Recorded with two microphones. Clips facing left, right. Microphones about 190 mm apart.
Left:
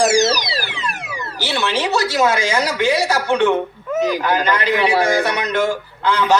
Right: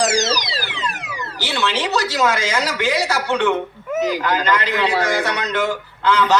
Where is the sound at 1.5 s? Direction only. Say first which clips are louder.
Left 1 dB; 15° left (ahead or behind).